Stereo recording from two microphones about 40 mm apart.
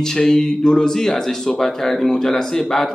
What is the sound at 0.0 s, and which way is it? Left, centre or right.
A man's voice, centre.